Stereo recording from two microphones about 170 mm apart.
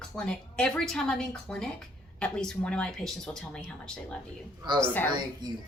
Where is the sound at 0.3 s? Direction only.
5° left (ahead or behind).